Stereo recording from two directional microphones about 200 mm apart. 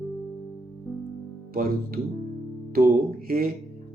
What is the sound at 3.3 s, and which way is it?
Speech, 45° right (ahead or behind).